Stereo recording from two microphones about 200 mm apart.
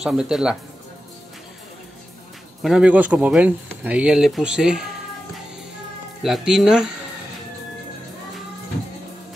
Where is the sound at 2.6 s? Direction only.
5° right (ahead or behind).